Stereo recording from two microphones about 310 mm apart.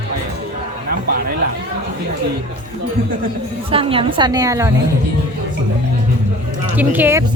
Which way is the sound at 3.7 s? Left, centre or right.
Centre.